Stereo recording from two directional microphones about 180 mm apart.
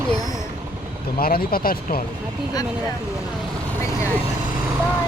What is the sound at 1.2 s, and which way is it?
Speech, 55° left (ahead or behind).